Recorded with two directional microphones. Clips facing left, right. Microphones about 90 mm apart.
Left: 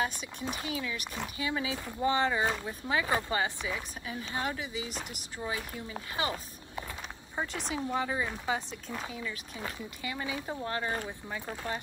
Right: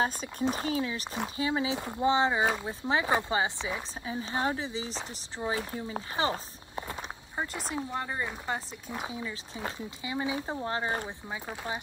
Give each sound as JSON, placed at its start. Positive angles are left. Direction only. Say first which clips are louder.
{"t": 0.0, "sound": "speech", "louder": "right 5 dB", "side_deg": -35}
{"t": 7.3, "sound": "speech", "louder": "even", "side_deg": 0}
{"t": 8.8, "sound": "speech", "louder": "right 2 dB", "side_deg": -20}